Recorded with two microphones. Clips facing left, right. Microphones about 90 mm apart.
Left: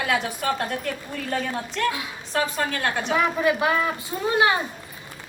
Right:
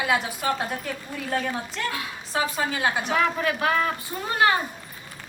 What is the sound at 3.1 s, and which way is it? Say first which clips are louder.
Speech: left 2 dB; 15° left (ahead or behind).